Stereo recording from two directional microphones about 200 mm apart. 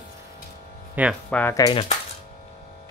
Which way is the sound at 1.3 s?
10° left (ahead or behind).